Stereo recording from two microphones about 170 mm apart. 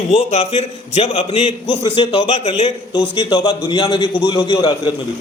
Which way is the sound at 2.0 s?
25° left (ahead or behind).